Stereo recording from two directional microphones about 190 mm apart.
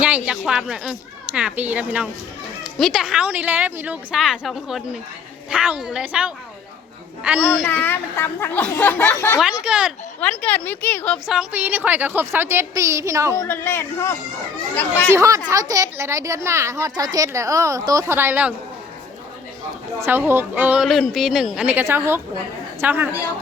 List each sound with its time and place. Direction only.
0.0 s a woman's voice: 5° right (ahead or behind)
7.5 s speech: 10° left (ahead or behind)
9.4 s a woman's voice: 5° right (ahead or behind)
10.2 s speech: 5° left (ahead or behind)
11.3 s speech: 10° right (ahead or behind)
13.3 s speech: 15° left (ahead or behind)
15.1 s speech: 15° right (ahead or behind)
20.1 s speech: 10° right (ahead or behind)